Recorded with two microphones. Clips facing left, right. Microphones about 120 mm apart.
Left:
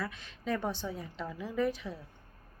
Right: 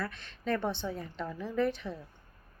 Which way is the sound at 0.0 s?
5° left (ahead or behind).